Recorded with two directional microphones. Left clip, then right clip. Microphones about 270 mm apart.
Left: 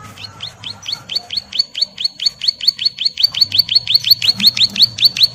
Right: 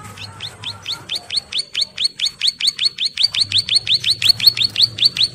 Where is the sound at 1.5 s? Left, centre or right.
Right.